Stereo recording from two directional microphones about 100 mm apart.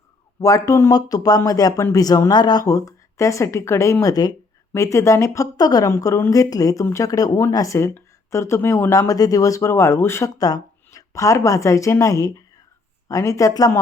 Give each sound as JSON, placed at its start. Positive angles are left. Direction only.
{"t": 0.4, "sound": "speech", "side_deg": 35}
{"t": 10.3, "sound": "speech", "side_deg": 40}